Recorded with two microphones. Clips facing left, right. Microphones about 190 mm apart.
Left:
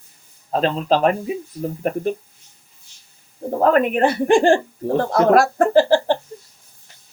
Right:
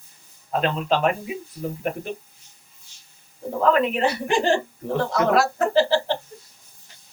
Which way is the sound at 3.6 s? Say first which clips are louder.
Left 4 dB; 50° left (ahead or behind).